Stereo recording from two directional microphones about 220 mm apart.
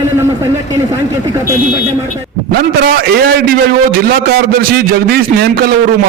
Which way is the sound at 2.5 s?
45° right (ahead or behind).